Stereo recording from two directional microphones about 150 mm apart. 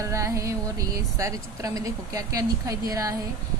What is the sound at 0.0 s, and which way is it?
A woman's voice, 20° right (ahead or behind).